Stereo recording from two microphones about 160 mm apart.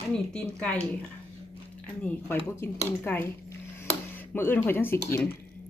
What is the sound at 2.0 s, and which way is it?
A woman's voice, 10° left (ahead or behind).